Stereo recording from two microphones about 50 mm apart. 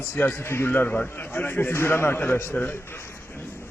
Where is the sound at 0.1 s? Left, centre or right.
Left.